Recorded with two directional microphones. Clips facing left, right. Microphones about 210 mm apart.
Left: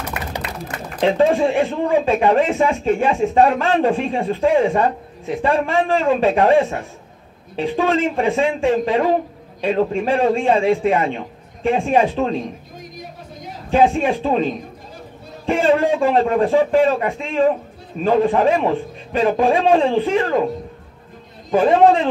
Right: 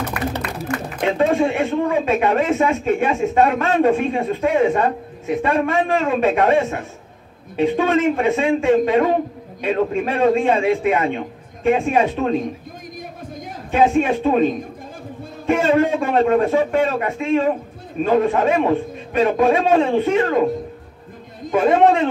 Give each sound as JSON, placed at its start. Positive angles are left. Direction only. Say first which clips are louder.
{"t": 0.1, "sound": "a man's voice", "louder": "right 3 dB", "side_deg": 20}
{"t": 13.7, "sound": "a man's voice", "louder": "even", "side_deg": 30}
{"t": 15.4, "sound": "a man's voice", "louder": "even", "side_deg": 30}
{"t": 21.5, "sound": "a man's voice", "louder": "left 1 dB", "side_deg": 30}